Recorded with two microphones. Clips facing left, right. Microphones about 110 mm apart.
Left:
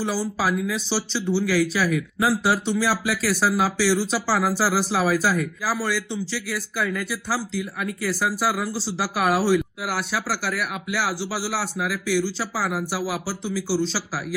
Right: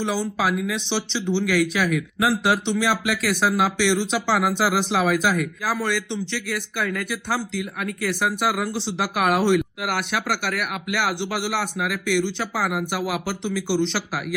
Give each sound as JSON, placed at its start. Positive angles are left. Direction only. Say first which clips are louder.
{"t": 0.0, "sound": "speech", "louder": "right 1 dB", "side_deg": 5}